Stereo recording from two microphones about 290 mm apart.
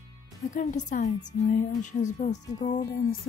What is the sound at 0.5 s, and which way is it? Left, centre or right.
A woman's voice, left.